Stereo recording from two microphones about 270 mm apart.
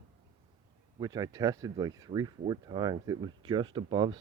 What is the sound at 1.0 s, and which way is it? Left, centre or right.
Speech, centre.